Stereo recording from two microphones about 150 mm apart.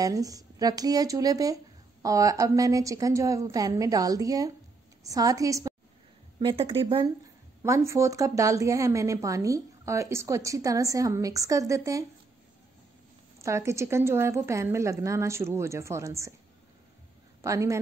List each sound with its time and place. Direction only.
0.0 s a woman's voice: 25° right (ahead or behind)
6.4 s speech: 40° right (ahead or behind)
7.6 s a woman's voice: 20° right (ahead or behind)
13.4 s a woman's voice: 20° right (ahead or behind)
17.4 s a woman's voice: 20° right (ahead or behind)